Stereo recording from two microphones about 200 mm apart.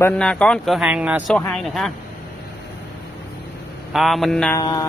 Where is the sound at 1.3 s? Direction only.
5° left (ahead or behind).